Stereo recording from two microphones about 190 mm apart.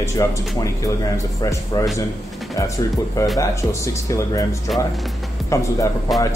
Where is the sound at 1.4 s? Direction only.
15° left (ahead or behind).